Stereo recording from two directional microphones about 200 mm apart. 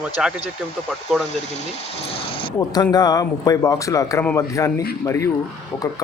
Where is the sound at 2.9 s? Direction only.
20° left (ahead or behind).